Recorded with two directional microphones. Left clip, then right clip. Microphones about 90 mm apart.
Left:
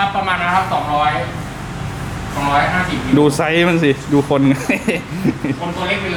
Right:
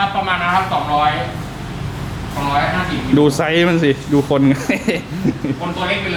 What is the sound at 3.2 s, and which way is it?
A man's voice, centre (ahead or behind).